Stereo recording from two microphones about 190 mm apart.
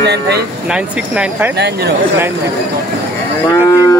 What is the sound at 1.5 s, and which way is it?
Cattle, 60° right (ahead or behind).